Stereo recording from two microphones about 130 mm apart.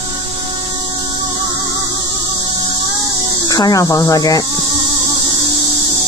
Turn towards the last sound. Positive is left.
turn(degrees=30)  # may be behind; listen again after turning